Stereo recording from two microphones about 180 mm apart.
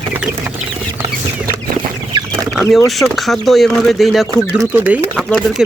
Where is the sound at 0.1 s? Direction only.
10° right (ahead or behind).